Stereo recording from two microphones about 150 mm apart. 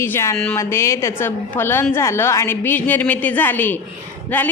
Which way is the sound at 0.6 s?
20° left (ahead or behind).